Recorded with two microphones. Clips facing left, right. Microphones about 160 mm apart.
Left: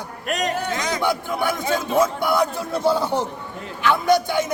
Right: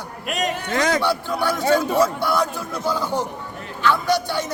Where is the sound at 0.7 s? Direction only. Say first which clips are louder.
Right 5 dB; 60° right (ahead or behind).